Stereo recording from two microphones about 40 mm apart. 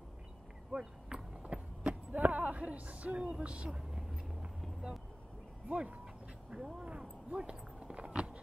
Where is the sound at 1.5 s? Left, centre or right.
Right.